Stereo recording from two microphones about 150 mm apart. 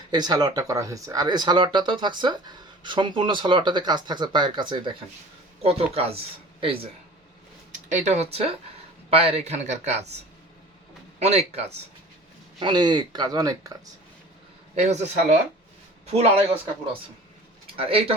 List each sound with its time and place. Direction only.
0.1 s speech: 30° right (ahead or behind)
5.6 s speech: 40° right (ahead or behind)
7.7 s a man's voice: 55° right (ahead or behind)
11.2 s a man's voice: 45° right (ahead or behind)
12.5 s speech: 30° right (ahead or behind)
14.8 s a man's voice: 50° right (ahead or behind)
17.7 s speech: 40° right (ahead or behind)